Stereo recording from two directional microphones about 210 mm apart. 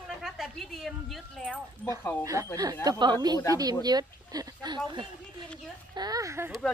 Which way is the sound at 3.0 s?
20° right (ahead or behind).